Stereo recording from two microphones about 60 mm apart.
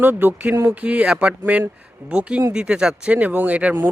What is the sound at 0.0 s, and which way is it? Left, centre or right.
Speech, right.